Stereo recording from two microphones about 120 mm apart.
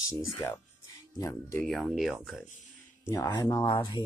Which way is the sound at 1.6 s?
Centre (ahead or behind).